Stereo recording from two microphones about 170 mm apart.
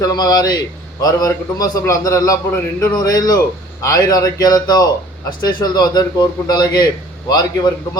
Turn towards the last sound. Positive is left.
turn(degrees=25)  # may be behind; listen again after turning